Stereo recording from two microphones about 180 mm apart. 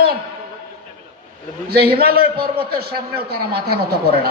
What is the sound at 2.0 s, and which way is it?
A woman's voice, 60° right (ahead or behind).